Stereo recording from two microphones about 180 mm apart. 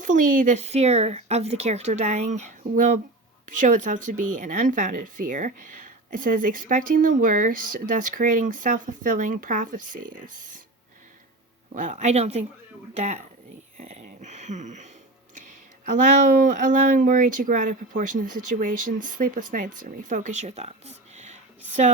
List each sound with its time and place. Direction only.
0.0 s speech: 50° right (ahead or behind)
11.7 s speech: 45° right (ahead or behind)
16.2 s speech: 50° right (ahead or behind)